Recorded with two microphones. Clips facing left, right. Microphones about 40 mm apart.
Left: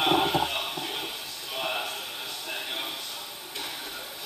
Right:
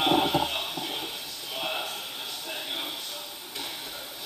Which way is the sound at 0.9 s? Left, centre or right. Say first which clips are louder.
Even; centre.